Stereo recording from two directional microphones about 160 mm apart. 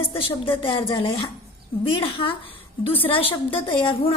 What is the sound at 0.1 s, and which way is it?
A woman's voice, 35° left (ahead or behind).